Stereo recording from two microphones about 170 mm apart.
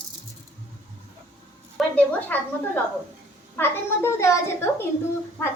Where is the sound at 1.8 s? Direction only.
Centre (ahead or behind).